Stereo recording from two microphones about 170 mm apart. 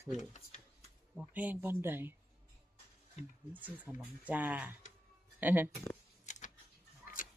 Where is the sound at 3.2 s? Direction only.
40° left (ahead or behind).